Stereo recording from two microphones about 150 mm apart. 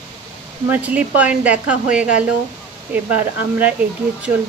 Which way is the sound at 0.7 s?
10° right (ahead or behind).